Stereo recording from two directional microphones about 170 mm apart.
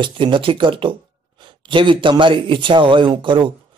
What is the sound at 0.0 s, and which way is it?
Speech, 30° right (ahead or behind).